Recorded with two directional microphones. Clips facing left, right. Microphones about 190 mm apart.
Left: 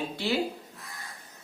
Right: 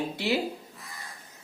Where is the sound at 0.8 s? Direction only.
Centre (ahead or behind).